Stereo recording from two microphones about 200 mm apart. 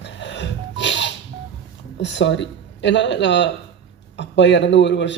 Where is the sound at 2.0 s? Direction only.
60° left (ahead or behind).